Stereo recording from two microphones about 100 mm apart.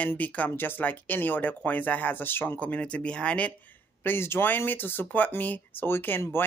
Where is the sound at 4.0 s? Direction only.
25° left (ahead or behind).